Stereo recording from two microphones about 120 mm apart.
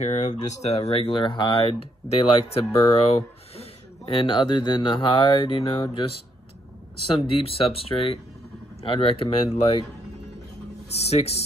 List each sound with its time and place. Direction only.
0.0 s speech: 75° left (ahead or behind); by 6.0 s 45° left (ahead or behind)
7.2 s speech: 50° left (ahead or behind)
10.9 s speech: 60° left (ahead or behind)